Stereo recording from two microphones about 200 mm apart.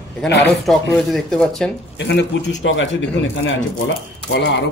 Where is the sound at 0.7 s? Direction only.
Centre (ahead or behind).